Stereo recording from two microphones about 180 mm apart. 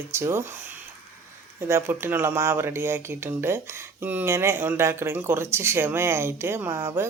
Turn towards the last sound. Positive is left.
turn(degrees=-15)  # may be behind; listen again after turning